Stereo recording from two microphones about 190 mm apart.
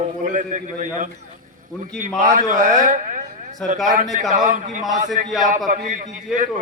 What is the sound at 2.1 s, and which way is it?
A man's voice, 45° right (ahead or behind).